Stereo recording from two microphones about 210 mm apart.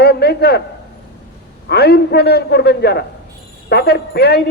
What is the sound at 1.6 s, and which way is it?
Speech, 50° left (ahead or behind).